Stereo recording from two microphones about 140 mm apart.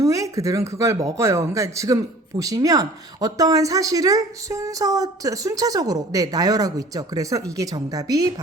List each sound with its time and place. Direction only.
0.0 s speech: 25° right (ahead or behind)